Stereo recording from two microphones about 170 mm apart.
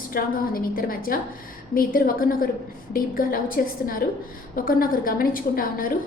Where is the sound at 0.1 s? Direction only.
60° left (ahead or behind).